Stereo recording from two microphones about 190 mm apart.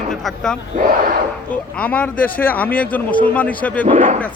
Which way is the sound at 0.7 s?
45° right (ahead or behind).